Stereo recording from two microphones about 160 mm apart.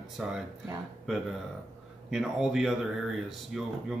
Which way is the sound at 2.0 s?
Centre (ahead or behind).